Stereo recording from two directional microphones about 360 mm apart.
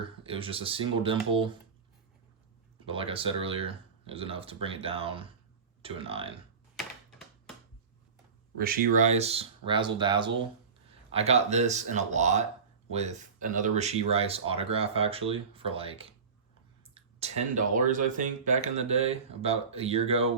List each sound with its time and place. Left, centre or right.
0.0 s speech: centre
2.8 s speech: centre
6.7 s a sound: centre
8.5 s speech: right